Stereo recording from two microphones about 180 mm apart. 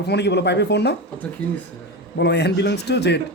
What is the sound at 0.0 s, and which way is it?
Speech, 70° left (ahead or behind).